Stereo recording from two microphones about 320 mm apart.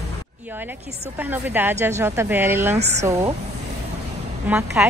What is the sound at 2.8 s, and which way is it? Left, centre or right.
Speech, centre.